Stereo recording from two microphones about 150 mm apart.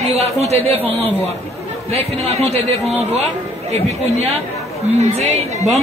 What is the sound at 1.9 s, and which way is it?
A man's voice, 45° right (ahead or behind).